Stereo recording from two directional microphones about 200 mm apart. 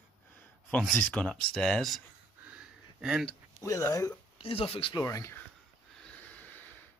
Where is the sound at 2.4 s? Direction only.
5° right (ahead or behind).